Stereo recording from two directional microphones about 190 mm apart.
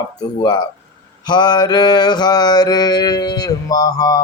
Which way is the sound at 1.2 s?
25° left (ahead or behind).